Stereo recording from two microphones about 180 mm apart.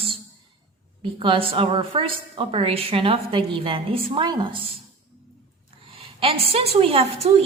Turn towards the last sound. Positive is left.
turn(degrees=-35)  # may be behind; listen again after turning